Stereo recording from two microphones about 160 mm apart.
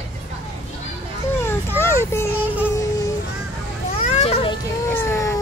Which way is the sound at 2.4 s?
10° right (ahead or behind).